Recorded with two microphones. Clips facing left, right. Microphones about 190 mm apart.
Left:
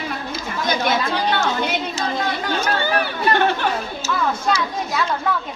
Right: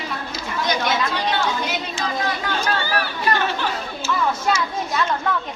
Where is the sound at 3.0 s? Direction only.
60° left (ahead or behind).